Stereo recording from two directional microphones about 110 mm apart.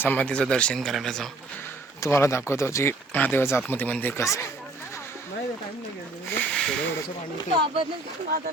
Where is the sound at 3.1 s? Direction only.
15° left (ahead or behind).